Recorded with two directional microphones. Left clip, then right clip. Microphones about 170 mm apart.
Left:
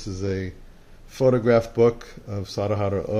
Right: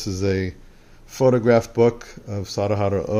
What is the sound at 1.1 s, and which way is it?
Speech, 25° right (ahead or behind).